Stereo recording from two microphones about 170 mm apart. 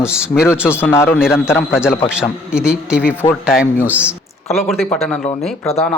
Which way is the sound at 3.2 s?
30° left (ahead or behind).